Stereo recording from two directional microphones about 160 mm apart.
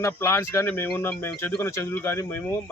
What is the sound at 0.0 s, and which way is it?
Speech, 15° left (ahead or behind).